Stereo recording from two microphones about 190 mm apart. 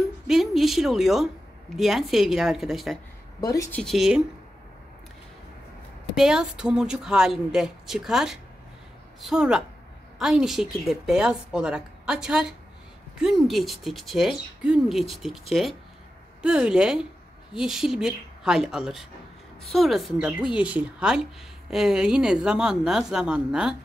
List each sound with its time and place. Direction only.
0.3 s a woman's voice: centre (ahead or behind)
3.3 s speech: 20° left (ahead or behind)
3.8 s a woman's voice: centre (ahead or behind)
6.1 s a woman's voice: 5° right (ahead or behind)
16.4 s a woman's voice: 5° right (ahead or behind)